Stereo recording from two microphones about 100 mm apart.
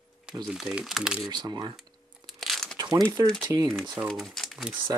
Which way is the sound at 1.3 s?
45° right (ahead or behind).